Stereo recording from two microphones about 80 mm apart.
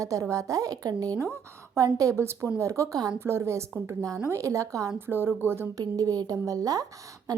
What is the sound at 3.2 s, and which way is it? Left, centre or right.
Speech, right.